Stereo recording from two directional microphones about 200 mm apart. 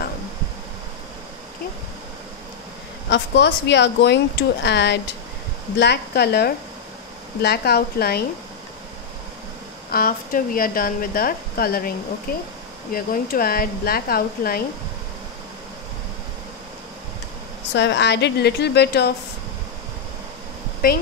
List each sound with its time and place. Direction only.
3.1 s a woman's voice: 60° left (ahead or behind)
9.8 s a woman's voice: 45° left (ahead or behind)
17.7 s speech: 60° left (ahead or behind)